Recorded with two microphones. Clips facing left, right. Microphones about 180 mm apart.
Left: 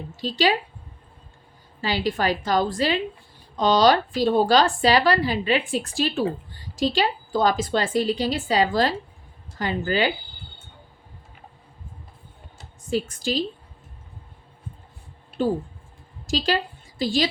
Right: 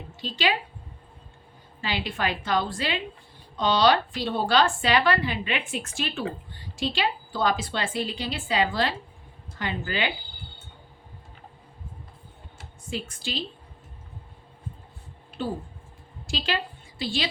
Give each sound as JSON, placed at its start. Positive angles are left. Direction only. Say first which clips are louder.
{"t": 0.2, "sound": "a woman's voice", "louder": "left 5 dB", "side_deg": 40}
{"t": 1.8, "sound": "a woman's voice", "louder": "left 5 dB", "side_deg": 40}
{"t": 12.9, "sound": "a woman's voice", "louder": "left 8 dB", "side_deg": 40}
{"t": 15.4, "sound": "a woman's voice", "louder": "left 7 dB", "side_deg": 45}